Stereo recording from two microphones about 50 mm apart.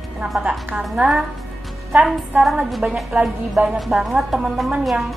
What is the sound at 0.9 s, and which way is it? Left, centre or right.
Speech, centre.